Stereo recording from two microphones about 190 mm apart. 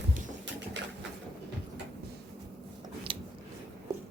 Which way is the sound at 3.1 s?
25° right (ahead or behind).